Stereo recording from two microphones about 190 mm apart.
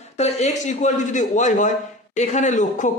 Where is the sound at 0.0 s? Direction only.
35° left (ahead or behind).